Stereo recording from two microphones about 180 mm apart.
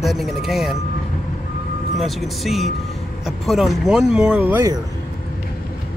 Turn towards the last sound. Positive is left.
turn(degrees=-10)  # may be behind; listen again after turning